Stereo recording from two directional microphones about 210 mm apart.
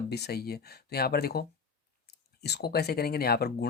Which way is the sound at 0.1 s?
50° left (ahead or behind).